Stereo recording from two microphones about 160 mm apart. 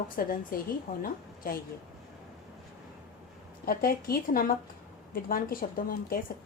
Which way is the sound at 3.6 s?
65° left (ahead or behind).